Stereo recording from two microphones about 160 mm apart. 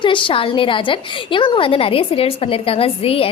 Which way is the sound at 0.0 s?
30° left (ahead or behind).